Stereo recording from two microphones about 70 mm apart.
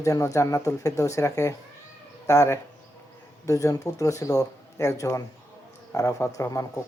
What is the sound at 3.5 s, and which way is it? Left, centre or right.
Speech, left.